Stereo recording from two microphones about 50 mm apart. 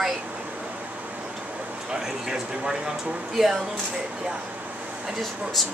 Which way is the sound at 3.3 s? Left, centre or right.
Centre.